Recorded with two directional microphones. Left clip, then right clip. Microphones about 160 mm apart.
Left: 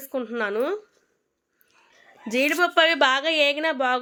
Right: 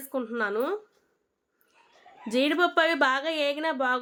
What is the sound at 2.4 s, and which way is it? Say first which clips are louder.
Speech: left 4 dB; 30° left (ahead or behind).